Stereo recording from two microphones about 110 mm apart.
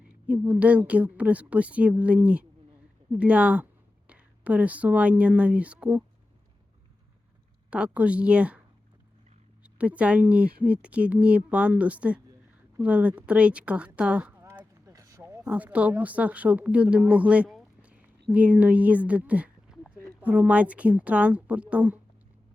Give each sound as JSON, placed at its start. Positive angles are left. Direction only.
{"t": 0.3, "sound": "a woman's voice", "side_deg": -15}
{"t": 7.7, "sound": "speech", "side_deg": -10}
{"t": 9.6, "sound": "speech", "side_deg": -10}
{"t": 14.6, "sound": "a sound", "side_deg": -30}
{"t": 15.4, "sound": "speech", "side_deg": -15}